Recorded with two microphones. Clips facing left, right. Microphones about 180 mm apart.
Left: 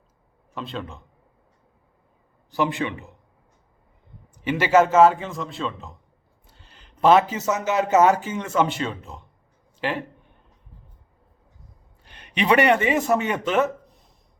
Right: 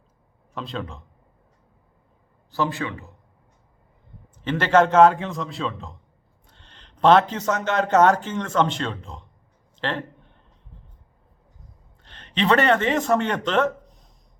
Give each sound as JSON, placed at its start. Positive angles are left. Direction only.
{"t": 0.5, "sound": "a man's voice", "side_deg": 0}
{"t": 2.5, "sound": "a man's voice", "side_deg": 20}
{"t": 4.4, "sound": "a man's voice", "side_deg": 10}
{"t": 12.0, "sound": "a man's voice", "side_deg": 10}